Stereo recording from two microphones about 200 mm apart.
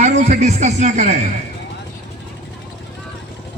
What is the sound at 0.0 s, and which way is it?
A man's voice, 35° right (ahead or behind).